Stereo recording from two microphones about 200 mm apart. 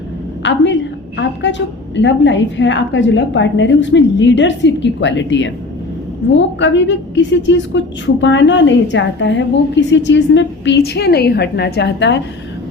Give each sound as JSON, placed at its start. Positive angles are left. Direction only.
{"t": 0.4, "sound": "a woman's voice", "side_deg": 65}